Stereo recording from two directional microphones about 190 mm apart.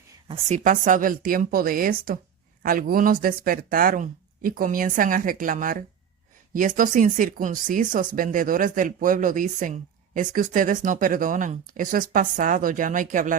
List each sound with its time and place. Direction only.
0.3 s speech: 40° right (ahead or behind)